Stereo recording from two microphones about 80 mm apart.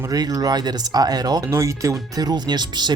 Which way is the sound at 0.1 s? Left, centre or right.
Right.